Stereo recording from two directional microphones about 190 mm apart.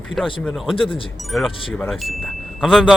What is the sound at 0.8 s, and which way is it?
Speech, 30° left (ahead or behind).